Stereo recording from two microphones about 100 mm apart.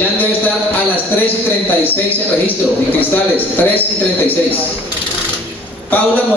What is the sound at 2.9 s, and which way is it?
Speech, 20° left (ahead or behind).